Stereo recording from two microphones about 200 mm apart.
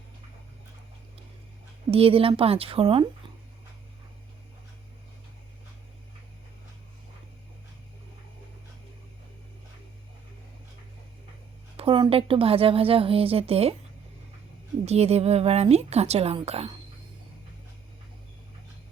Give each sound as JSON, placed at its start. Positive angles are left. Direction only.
{"t": 1.9, "sound": "speech", "side_deg": -30}
{"t": 11.8, "sound": "speech", "side_deg": -25}
{"t": 14.8, "sound": "a woman's voice", "side_deg": -30}